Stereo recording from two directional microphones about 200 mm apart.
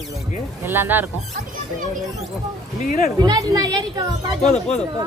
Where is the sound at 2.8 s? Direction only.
35° left (ahead or behind).